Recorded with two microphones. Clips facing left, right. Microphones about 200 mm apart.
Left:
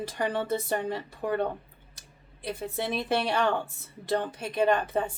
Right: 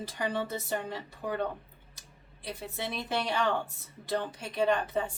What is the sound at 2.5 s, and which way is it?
Speech, 50° left (ahead or behind).